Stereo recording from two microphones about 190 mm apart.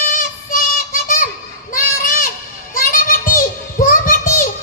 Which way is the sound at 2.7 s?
45° left (ahead or behind).